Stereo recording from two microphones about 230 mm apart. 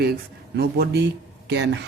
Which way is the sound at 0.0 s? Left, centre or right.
Right.